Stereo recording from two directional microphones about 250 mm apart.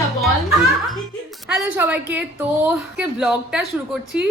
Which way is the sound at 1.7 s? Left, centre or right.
Centre.